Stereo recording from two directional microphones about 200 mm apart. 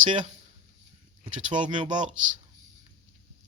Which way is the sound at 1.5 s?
25° right (ahead or behind).